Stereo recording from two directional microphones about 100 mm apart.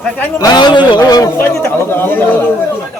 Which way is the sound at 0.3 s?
45° left (ahead or behind).